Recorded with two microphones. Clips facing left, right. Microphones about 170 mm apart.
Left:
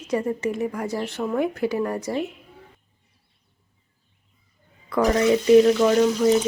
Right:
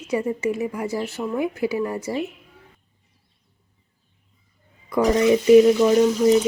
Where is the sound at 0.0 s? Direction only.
10° right (ahead or behind).